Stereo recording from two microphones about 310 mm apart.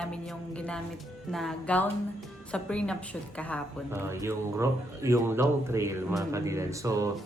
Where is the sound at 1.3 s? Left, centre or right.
Centre.